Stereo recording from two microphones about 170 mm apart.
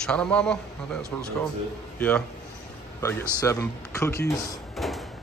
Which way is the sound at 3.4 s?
15° left (ahead or behind).